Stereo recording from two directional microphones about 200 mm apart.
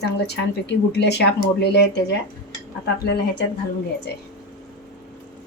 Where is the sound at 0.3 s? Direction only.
55° left (ahead or behind).